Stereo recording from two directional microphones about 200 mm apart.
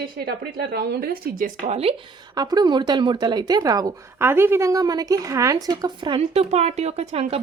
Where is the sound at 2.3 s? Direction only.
20° right (ahead or behind).